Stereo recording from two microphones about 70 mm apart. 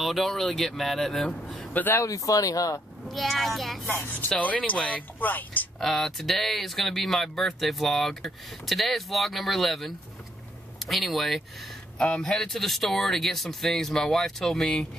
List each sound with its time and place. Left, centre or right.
0.0 s speech: centre
1.7 s speech: left
2.0 s speech: left
3.1 s speech: centre
3.9 s speech: left
4.4 s speech: left
5.8 s speech: centre